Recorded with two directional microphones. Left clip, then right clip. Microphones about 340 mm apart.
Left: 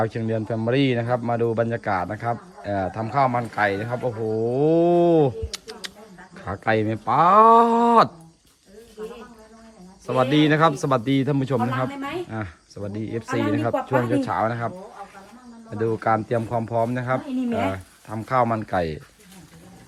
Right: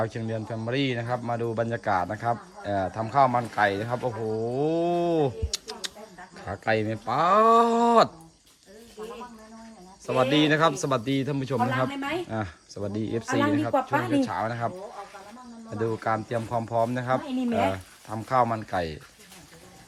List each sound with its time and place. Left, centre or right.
0.0 s speech: centre
3.9 s speech: right
4.5 s speech: centre
10.1 s speech: centre
15.7 s speech: centre